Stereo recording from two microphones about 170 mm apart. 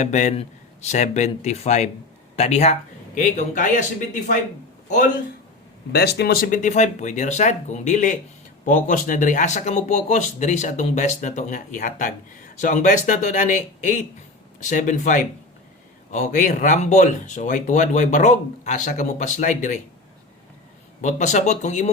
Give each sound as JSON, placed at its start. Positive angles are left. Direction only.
{"t": 0.0, "sound": "speech", "side_deg": 45}
{"t": 5.9, "sound": "speech", "side_deg": 70}
{"t": 21.0, "sound": "speech", "side_deg": 45}